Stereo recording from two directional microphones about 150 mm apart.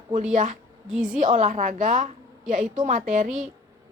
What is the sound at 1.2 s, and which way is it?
A woman's voice, 55° right (ahead or behind).